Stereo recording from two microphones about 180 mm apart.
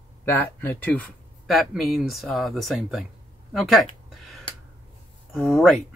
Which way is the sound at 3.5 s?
Centre (ahead or behind).